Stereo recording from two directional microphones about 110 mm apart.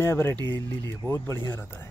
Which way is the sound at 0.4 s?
40° right (ahead or behind).